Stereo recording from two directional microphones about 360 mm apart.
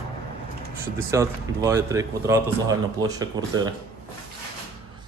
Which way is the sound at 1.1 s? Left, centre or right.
Centre.